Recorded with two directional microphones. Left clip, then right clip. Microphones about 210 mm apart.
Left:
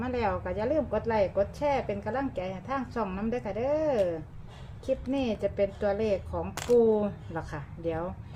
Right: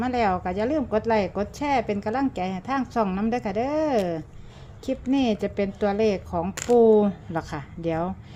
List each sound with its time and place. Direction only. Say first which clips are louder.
0.0 s a woman's voice: right 6 dB; 40° right (ahead or behind)